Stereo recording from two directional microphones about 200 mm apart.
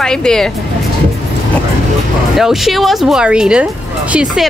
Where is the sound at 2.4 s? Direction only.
Centre (ahead or behind).